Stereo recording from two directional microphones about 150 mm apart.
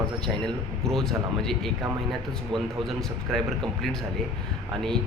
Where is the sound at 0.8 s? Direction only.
5° left (ahead or behind).